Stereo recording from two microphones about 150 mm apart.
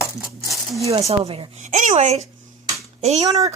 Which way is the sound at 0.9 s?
40° right (ahead or behind).